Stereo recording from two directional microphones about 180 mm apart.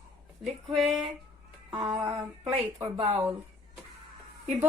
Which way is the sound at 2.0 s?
15° right (ahead or behind).